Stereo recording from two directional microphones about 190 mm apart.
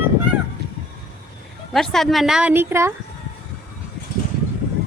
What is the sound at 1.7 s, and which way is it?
A woman's voice, centre (ahead or behind).